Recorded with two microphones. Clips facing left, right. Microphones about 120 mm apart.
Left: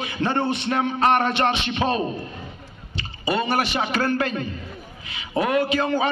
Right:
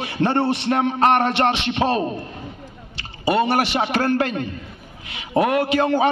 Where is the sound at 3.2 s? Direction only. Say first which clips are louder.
Right 4 dB; 75° right (ahead or behind).